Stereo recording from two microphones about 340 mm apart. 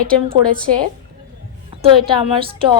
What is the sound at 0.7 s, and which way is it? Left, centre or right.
A woman's voice, centre.